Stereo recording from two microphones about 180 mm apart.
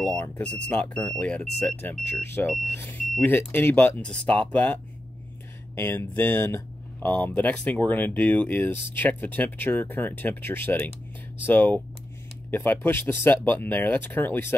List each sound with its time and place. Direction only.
0.0 s speech: 5° left (ahead or behind)
5.8 s speech: 10° left (ahead or behind)